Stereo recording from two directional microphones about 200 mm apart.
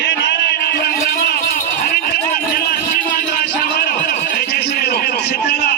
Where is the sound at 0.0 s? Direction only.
65° left (ahead or behind).